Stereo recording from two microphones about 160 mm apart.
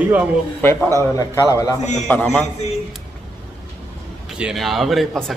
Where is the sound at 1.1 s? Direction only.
20° left (ahead or behind).